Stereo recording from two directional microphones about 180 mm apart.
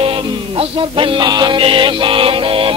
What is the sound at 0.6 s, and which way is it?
Music, 30° right (ahead or behind).